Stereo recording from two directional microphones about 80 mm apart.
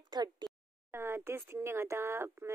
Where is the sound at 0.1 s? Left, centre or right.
Right.